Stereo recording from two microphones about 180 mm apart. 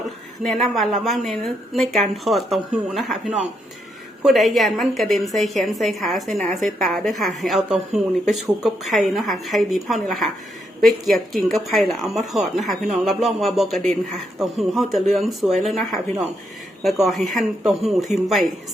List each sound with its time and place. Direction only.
0.4 s speech: centre (ahead or behind)